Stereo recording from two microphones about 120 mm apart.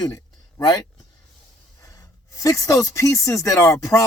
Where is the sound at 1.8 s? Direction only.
30° left (ahead or behind).